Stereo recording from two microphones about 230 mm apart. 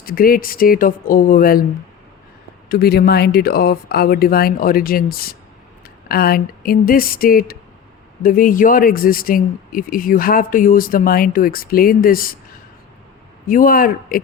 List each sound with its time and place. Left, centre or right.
0.0 s speech: left
2.6 s speech: left
13.5 s speech: left